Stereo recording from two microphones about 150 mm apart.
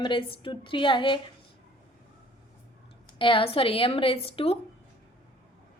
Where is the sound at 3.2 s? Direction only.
35° left (ahead or behind).